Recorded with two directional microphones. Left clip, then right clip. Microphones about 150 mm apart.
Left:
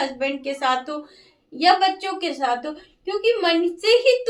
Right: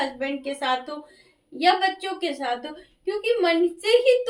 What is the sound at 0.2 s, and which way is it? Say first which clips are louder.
A woman's voice: left 4 dB; 30° left (ahead or behind).